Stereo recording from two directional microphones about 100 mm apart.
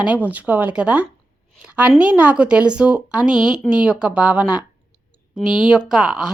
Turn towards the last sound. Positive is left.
turn(degrees=-10)  # may be behind; listen again after turning